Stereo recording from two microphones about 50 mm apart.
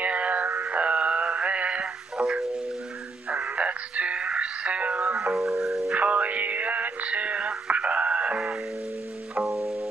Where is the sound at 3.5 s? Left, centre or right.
Right.